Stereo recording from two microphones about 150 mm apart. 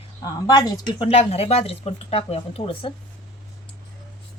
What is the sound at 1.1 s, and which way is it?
Speech, 40° left (ahead or behind).